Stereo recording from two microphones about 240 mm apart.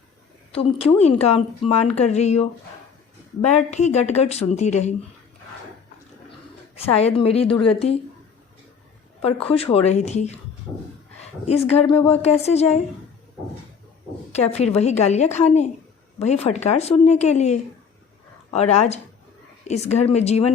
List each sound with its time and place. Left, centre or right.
0.5 s speech: left
3.5 s speech: left
6.7 s speech: left
9.2 s speech: left
11.4 s speech: left
14.3 s speech: left